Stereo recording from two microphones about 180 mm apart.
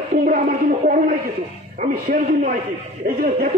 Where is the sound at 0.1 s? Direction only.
50° right (ahead or behind).